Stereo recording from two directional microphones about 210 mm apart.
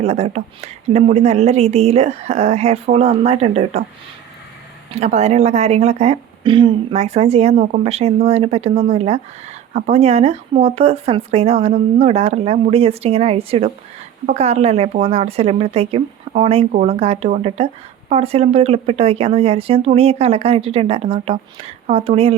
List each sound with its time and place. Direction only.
0.0 s a woman's voice: 30° right (ahead or behind)
4.9 s a woman's voice: 30° right (ahead or behind)